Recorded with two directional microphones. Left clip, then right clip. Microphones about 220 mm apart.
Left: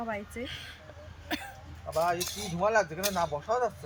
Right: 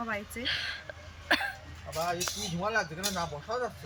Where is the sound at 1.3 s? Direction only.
Centre (ahead or behind).